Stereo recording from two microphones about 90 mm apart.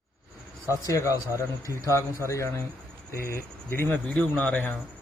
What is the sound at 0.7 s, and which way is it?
Speech, 35° left (ahead or behind).